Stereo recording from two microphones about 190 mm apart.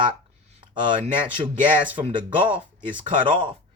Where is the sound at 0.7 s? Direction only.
25° right (ahead or behind).